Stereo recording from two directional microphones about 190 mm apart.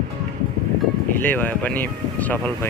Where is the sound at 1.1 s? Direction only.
10° left (ahead or behind).